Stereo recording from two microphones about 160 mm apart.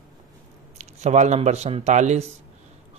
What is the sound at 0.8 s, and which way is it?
Speech, 50° right (ahead or behind).